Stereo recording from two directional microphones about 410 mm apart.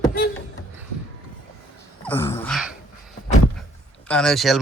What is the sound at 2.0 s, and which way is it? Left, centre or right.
Gasp, centre.